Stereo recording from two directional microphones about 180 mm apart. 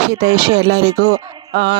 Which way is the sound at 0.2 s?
65° right (ahead or behind).